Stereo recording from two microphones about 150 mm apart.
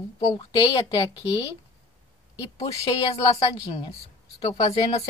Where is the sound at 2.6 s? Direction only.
45° left (ahead or behind).